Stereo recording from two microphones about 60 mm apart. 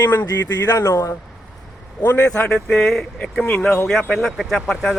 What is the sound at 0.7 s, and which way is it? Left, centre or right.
Speech, left.